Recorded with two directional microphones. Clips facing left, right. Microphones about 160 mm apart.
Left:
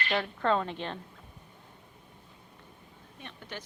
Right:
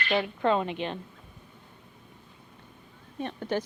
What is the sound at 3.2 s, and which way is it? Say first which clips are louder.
Speech: right 14 dB; 45° right (ahead or behind).